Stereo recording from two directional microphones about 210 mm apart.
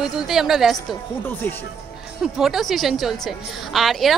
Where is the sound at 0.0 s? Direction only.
Centre (ahead or behind).